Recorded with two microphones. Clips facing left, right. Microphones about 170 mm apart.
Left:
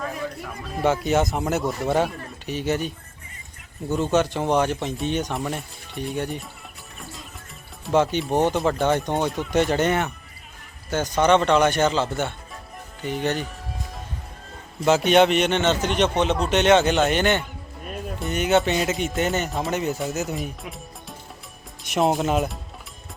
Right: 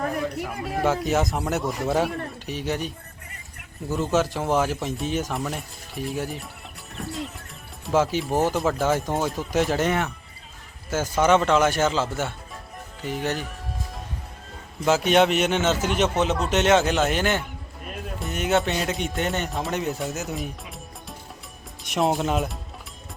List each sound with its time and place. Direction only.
0.0 s a sound: 60° right (ahead or behind)
1.0 s speech: centre (ahead or behind)
7.9 s speech: centre (ahead or behind)
14.8 s speech: centre (ahead or behind)